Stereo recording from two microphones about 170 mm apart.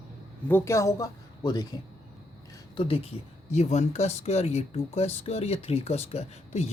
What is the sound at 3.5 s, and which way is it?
Speech, 40° left (ahead or behind).